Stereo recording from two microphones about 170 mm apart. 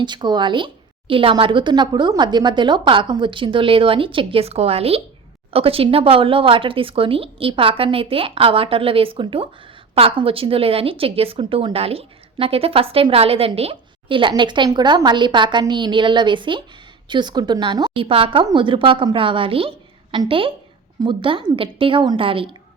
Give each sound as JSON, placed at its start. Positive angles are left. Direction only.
{"t": 0.0, "sound": "a woman's voice", "side_deg": -25}